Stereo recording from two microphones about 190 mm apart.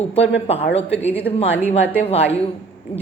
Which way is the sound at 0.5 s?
70° left (ahead or behind).